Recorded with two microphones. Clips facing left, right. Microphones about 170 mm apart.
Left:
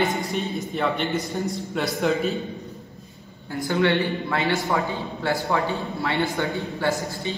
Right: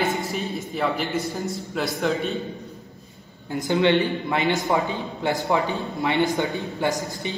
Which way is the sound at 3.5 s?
20° right (ahead or behind).